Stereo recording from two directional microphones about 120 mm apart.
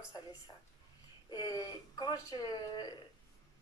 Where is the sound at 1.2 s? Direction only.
30° left (ahead or behind).